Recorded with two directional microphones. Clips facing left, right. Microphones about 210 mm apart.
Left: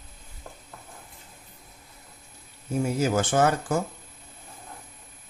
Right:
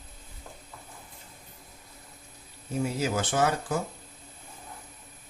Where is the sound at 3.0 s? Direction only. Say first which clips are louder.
Left 6 dB; 50° left (ahead or behind).